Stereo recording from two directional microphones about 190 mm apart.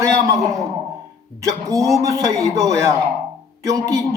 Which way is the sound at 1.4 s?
15° right (ahead or behind).